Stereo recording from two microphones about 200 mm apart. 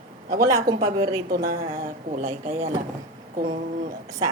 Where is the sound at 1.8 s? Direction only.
35° right (ahead or behind).